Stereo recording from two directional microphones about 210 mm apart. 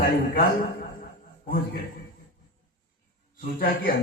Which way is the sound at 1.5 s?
40° left (ahead or behind).